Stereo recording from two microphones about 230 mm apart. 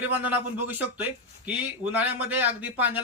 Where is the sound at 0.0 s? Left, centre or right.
Centre.